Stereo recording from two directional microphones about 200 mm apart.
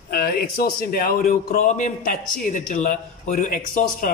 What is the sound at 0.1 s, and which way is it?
Speech, 50° left (ahead or behind).